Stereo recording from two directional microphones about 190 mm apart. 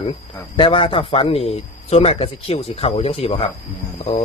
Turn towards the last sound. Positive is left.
turn(degrees=30)  # may be behind; listen again after turning